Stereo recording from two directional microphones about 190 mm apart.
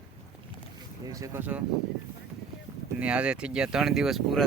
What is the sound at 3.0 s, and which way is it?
Speech, 5° right (ahead or behind).